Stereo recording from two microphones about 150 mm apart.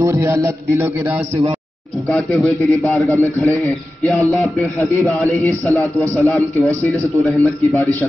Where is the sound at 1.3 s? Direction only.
40° right (ahead or behind).